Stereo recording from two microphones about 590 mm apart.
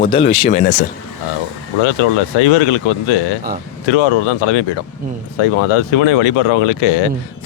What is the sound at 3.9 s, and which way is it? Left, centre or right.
Speech, left.